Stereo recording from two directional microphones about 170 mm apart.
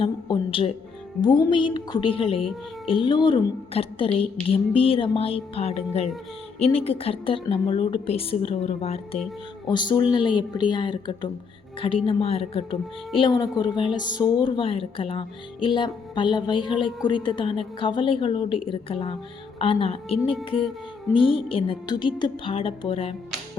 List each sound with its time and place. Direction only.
0.0 s a woman's voice: 30° left (ahead or behind)
9.6 s a woman's voice: 25° left (ahead or behind)